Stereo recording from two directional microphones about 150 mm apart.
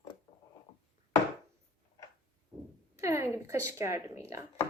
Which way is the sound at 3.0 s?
20° right (ahead or behind).